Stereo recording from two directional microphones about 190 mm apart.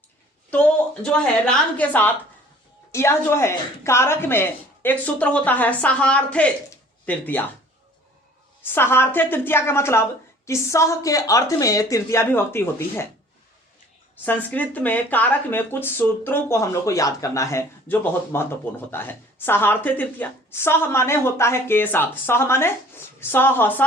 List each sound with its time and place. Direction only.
0.5 s a woman's voice: 5° left (ahead or behind)
8.6 s a woman's voice: 10° left (ahead or behind)
14.3 s a woman's voice: 10° left (ahead or behind)